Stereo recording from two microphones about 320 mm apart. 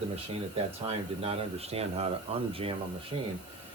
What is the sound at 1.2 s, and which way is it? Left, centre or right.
Speech, centre.